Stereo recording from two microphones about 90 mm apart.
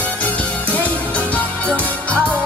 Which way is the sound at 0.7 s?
15° left (ahead or behind).